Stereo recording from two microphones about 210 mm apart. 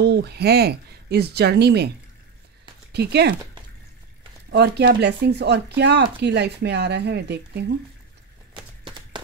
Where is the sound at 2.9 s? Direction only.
50° right (ahead or behind).